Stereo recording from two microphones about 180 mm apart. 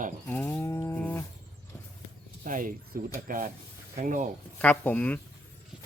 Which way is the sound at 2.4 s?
50° right (ahead or behind).